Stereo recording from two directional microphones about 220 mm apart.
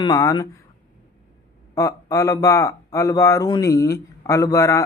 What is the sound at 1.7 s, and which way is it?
A man's voice, 15° left (ahead or behind).